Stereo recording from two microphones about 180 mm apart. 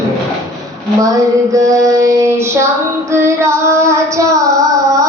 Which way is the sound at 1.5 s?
20° right (ahead or behind).